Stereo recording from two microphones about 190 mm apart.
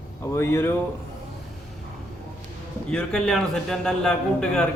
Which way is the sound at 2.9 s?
5° left (ahead or behind).